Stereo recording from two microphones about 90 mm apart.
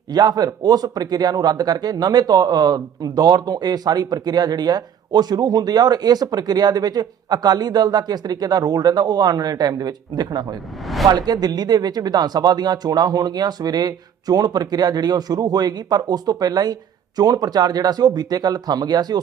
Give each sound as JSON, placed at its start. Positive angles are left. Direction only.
{"t": 0.1, "sound": "speech", "side_deg": -50}
{"t": 10.8, "sound": "speech", "side_deg": 0}
{"t": 11.3, "sound": "speech", "side_deg": -50}